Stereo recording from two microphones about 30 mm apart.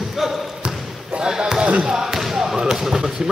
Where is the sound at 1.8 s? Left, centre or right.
Right.